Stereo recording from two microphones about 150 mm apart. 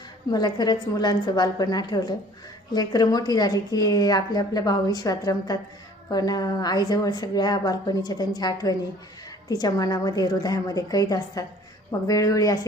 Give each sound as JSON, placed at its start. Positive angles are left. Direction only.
{"t": 0.3, "sound": "speech", "side_deg": 25}